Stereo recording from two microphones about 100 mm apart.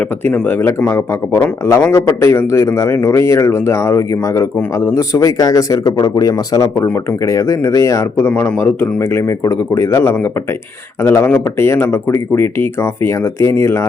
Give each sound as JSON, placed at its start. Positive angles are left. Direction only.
{"t": 0.4, "sound": "a man's voice", "side_deg": 20}
{"t": 8.3, "sound": "a man's voice", "side_deg": 15}
{"t": 11.2, "sound": "a man's voice", "side_deg": 25}